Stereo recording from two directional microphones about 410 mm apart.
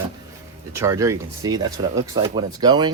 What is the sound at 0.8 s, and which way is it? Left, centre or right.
Speech, centre.